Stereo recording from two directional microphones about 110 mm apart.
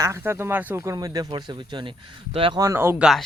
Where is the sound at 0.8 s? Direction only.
30° right (ahead or behind).